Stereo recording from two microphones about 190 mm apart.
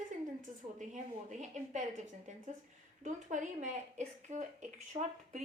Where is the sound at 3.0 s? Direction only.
40° right (ahead or behind).